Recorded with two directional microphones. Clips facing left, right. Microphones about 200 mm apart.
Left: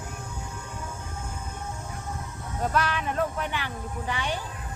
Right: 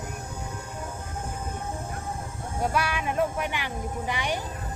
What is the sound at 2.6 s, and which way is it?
Speech, 10° right (ahead or behind).